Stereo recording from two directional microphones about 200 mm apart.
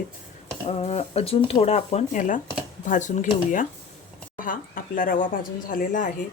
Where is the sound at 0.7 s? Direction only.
30° left (ahead or behind).